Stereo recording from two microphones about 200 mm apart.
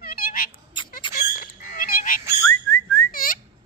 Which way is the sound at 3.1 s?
45° left (ahead or behind).